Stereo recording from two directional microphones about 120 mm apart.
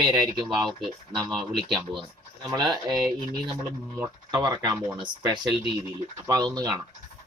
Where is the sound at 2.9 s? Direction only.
5° left (ahead or behind).